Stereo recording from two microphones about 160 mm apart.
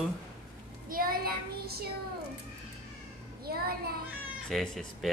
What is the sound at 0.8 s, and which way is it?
A child's voice, 65° right (ahead or behind).